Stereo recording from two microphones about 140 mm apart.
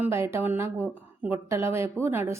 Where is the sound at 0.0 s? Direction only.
20° right (ahead or behind).